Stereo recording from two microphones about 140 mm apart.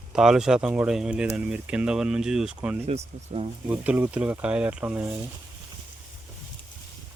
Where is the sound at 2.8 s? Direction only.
50° right (ahead or behind).